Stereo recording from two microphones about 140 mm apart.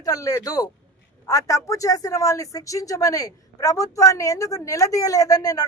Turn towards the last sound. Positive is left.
turn(degrees=25)  # may be behind; listen again after turning